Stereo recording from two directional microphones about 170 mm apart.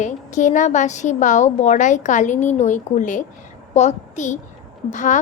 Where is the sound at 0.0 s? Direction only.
45° left (ahead or behind).